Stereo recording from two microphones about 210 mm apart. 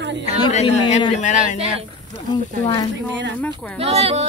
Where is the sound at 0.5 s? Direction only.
35° left (ahead or behind).